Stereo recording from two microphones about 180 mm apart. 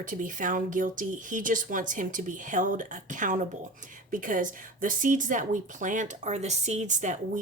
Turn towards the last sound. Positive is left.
turn(degrees=-45)  # may be behind; listen again after turning